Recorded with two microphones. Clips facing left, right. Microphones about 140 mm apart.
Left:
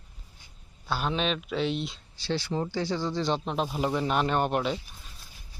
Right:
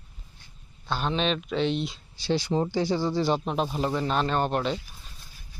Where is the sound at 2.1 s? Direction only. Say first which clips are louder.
Right 4 dB; 15° right (ahead or behind).